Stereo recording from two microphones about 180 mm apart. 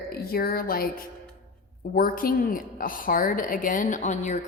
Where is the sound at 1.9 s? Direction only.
55° left (ahead or behind).